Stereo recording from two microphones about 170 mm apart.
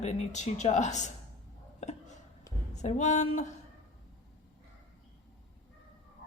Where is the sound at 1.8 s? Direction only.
45° left (ahead or behind).